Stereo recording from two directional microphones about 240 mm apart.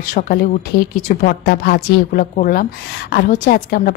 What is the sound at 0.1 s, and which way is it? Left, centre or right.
A woman's voice, left.